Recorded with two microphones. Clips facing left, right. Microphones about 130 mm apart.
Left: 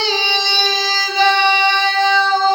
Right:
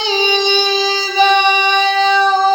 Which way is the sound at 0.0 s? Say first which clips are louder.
Right 5 dB; 15° right (ahead or behind).